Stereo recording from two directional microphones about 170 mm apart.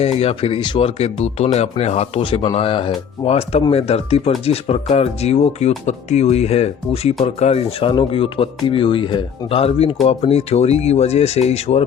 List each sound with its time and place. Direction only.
0.0 s speech: 35° left (ahead or behind)